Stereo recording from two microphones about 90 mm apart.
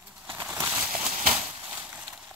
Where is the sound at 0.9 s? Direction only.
10° right (ahead or behind).